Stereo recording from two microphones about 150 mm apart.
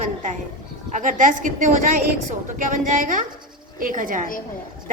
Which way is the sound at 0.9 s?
60° right (ahead or behind).